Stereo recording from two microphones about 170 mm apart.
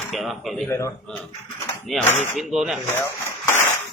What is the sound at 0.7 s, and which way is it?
Speech, 15° left (ahead or behind).